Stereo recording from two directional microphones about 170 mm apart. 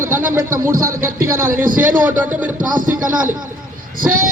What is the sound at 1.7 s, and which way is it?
Speech, 55° right (ahead or behind).